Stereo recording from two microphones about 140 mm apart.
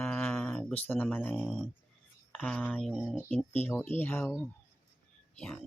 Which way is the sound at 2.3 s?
Centre (ahead or behind).